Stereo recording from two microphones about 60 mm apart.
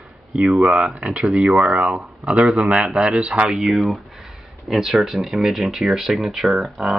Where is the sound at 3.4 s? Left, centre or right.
Centre.